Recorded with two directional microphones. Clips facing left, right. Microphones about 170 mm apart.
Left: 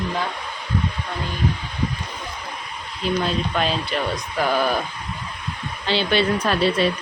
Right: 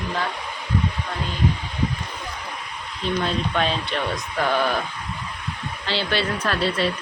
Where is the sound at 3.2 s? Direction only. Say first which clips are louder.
Right 1 dB; 5° left (ahead or behind).